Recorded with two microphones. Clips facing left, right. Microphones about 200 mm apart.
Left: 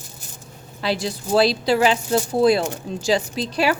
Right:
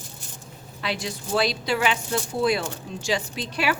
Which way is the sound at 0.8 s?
35° left (ahead or behind).